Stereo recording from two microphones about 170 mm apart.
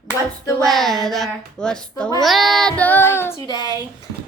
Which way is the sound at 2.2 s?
Centre (ahead or behind).